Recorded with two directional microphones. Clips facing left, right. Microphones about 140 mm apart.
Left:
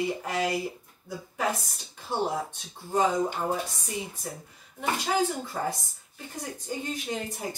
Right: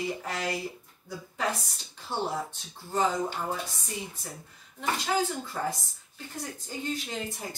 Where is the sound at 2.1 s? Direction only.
15° left (ahead or behind).